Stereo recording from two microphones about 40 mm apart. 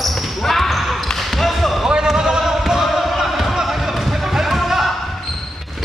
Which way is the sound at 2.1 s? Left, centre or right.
Centre.